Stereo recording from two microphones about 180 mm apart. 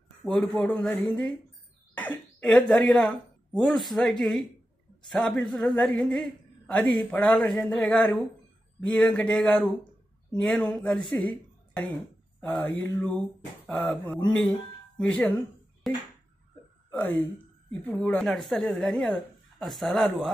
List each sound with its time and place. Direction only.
0.2 s a woman's voice: 5° left (ahead or behind)
16.9 s a woman's voice: 10° left (ahead or behind)